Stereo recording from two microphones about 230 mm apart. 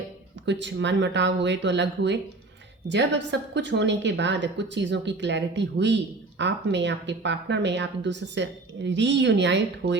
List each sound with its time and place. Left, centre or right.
0.4 s a woman's voice: right